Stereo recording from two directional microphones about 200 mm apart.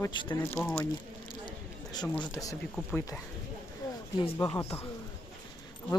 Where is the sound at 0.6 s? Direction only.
10° left (ahead or behind).